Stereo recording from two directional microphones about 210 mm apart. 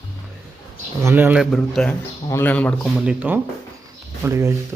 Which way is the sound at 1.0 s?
10° right (ahead or behind).